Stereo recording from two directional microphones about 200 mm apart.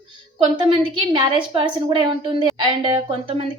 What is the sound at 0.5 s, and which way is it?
A woman's voice, 25° right (ahead or behind).